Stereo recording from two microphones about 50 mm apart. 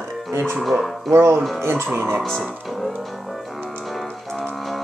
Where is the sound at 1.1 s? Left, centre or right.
Right.